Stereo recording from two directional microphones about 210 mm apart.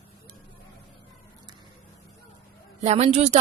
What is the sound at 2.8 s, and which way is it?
Speech, 30° right (ahead or behind).